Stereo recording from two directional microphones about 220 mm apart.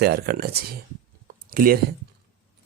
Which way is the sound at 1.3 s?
40° right (ahead or behind).